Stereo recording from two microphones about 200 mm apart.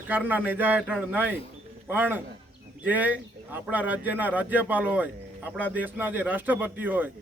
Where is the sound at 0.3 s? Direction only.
10° right (ahead or behind).